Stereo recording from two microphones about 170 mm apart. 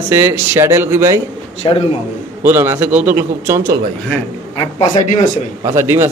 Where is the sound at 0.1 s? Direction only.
15° right (ahead or behind).